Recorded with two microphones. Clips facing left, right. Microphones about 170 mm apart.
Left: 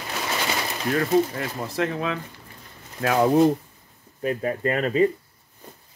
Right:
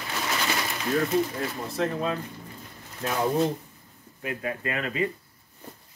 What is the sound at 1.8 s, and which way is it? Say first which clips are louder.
Speech: left 1 dB; 90° left.